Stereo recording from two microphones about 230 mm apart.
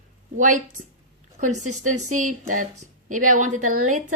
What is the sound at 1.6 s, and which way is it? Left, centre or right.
Speech, right.